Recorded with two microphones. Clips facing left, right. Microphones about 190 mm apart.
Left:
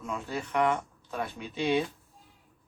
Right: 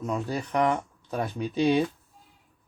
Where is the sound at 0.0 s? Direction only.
40° right (ahead or behind).